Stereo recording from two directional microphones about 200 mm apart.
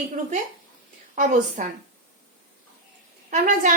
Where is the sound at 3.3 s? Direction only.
40° right (ahead or behind).